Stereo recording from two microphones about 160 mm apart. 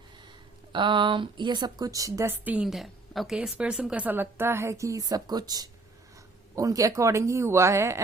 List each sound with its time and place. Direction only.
0.7 s speech: 30° right (ahead or behind)